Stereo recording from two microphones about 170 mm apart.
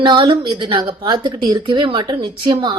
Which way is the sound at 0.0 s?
25° right (ahead or behind).